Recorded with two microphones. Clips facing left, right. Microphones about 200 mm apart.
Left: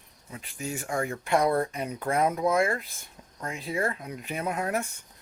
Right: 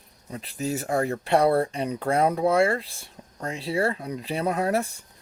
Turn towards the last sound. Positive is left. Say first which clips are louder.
# right 5 dB
turn(degrees=-35)  # may be behind; listen again after turning